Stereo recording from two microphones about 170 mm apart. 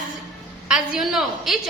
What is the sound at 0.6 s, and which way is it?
Speech, 5° right (ahead or behind).